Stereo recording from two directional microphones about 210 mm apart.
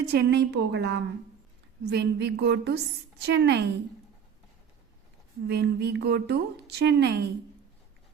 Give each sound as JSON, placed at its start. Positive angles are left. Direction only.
{"t": 0.1, "sound": "a woman's voice", "side_deg": -55}
{"t": 5.5, "sound": "a woman's voice", "side_deg": -50}